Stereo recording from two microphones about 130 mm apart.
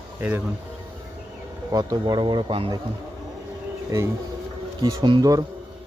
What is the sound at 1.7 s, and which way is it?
Speech, 30° right (ahead or behind).